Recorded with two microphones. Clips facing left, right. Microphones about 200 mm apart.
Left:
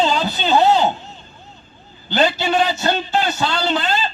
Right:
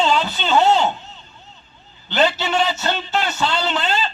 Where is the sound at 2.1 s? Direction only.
35° left (ahead or behind).